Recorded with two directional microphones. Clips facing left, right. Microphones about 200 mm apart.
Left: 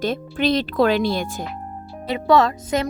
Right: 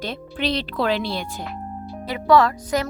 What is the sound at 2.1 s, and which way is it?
Speech, 25° left (ahead or behind).